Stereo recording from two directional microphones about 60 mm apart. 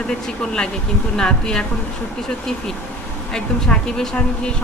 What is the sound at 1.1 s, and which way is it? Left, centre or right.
Speech, centre.